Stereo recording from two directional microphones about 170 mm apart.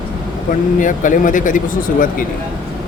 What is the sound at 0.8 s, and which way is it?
Speech, 50° left (ahead or behind).